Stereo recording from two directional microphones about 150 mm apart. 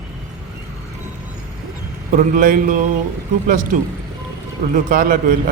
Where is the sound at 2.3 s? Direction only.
65° right (ahead or behind).